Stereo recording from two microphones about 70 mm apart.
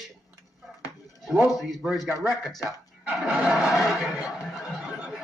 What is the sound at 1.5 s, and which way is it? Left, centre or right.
Speech, centre.